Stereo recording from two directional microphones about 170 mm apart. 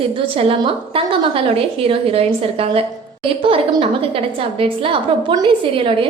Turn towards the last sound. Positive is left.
turn(degrees=-30)  # may be behind; listen again after turning